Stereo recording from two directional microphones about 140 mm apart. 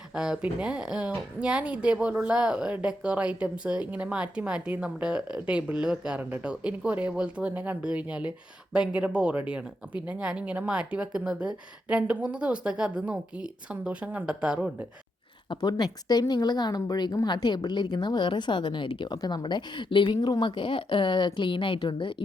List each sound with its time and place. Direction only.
0.1 s a woman's voice: 5° right (ahead or behind)
15.4 s a woman's voice: 30° left (ahead or behind)